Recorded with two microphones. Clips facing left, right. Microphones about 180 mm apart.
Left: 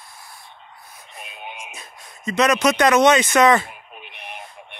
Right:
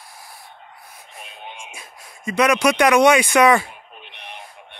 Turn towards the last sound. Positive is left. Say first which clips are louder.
# left 1 dB
turn(degrees=10)  # may be behind; listen again after turning